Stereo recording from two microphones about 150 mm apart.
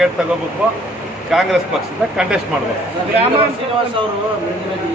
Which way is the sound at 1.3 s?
Centre (ahead or behind).